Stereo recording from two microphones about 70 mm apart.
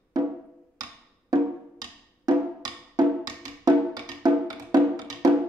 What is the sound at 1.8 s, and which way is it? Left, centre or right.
Music, right.